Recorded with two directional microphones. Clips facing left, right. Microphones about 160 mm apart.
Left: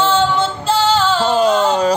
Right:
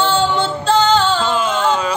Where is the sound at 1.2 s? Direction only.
40° left (ahead or behind).